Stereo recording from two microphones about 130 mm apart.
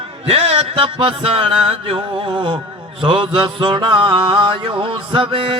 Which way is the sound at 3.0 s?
40° right (ahead or behind).